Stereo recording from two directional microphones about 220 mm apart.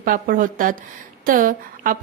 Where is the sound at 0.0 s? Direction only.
40° right (ahead or behind).